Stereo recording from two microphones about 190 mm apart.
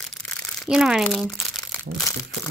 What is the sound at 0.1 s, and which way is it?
Crumpling, 5° left (ahead or behind).